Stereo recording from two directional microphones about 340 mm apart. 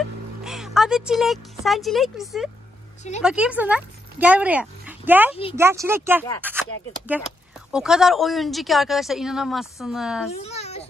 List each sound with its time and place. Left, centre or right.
0.4 s speech: centre
5.3 s speech: centre
5.6 s speech: centre
10.3 s a sound: centre